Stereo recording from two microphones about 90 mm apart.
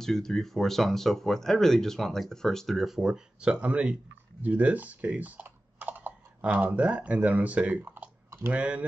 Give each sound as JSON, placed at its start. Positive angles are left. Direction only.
{"t": 0.0, "sound": "speech", "side_deg": 5}
{"t": 7.8, "sound": "typing", "side_deg": -25}